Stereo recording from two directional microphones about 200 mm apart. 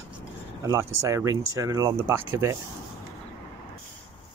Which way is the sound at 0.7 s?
15° right (ahead or behind).